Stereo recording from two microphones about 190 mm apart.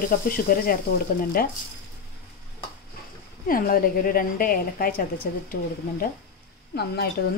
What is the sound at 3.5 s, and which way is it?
A woman's voice, 50° left (ahead or behind).